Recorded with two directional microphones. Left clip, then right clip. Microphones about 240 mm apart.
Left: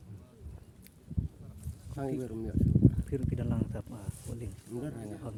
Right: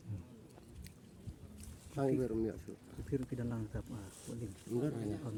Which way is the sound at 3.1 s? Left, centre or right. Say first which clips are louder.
Left 4 dB; left.